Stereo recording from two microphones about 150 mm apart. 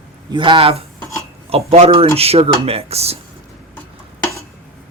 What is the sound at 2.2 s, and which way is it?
Cutlery, 40° right (ahead or behind).